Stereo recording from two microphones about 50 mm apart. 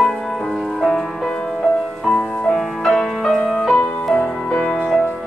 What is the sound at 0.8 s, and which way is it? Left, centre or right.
Music, centre.